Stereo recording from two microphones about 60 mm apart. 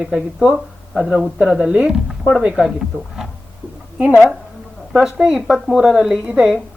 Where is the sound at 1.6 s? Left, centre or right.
Centre.